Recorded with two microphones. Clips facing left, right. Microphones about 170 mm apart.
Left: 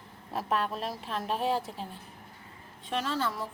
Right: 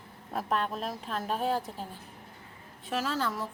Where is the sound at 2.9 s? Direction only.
5° right (ahead or behind).